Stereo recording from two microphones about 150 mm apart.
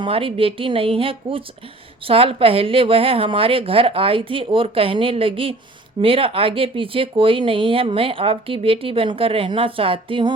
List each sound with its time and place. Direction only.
0.0 s speech: 35° right (ahead or behind)